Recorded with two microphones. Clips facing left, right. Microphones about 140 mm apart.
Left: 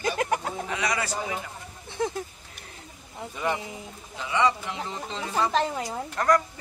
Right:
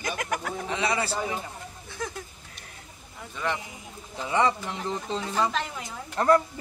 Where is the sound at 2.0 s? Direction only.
25° left (ahead or behind).